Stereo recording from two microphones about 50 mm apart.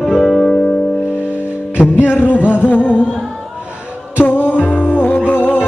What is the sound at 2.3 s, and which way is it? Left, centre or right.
Speech, right.